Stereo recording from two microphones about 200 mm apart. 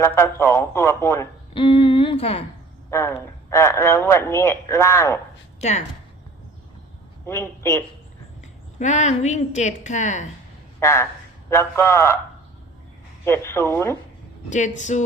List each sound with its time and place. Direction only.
0.0 s speech: 15° left (ahead or behind); by 2.4 s 30° left (ahead or behind)
2.9 s speech: 15° left (ahead or behind)
5.5 s a woman's voice: 35° left (ahead or behind)
7.3 s speech: 15° left (ahead or behind)
8.8 s a woman's voice: 35° left (ahead or behind)
10.8 s speech: 15° left (ahead or behind)
13.2 s speech: 10° left (ahead or behind)
14.5 s a woman's voice: 35° left (ahead or behind)